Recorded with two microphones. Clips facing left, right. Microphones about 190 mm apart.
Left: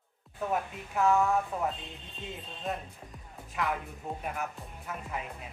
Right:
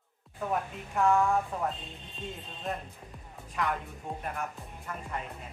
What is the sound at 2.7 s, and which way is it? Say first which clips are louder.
Speech: even; centre (ahead or behind).